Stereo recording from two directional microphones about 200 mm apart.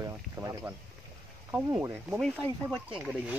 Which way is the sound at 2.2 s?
Centre (ahead or behind).